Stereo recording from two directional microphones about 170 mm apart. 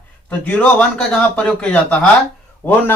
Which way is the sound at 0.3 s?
10° left (ahead or behind).